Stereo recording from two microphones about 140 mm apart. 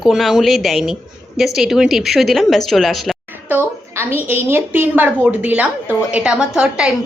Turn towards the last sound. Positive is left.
turn(degrees=-5)  # may be behind; listen again after turning